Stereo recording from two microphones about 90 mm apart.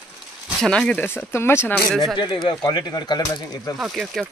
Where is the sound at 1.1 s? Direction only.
25° left (ahead or behind).